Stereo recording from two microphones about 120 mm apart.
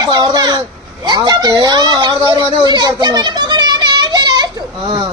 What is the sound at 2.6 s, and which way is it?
Children playing, 35° right (ahead or behind).